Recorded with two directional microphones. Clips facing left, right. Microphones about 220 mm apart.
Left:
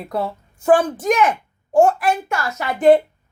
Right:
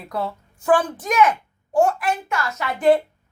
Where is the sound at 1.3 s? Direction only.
30° left (ahead or behind).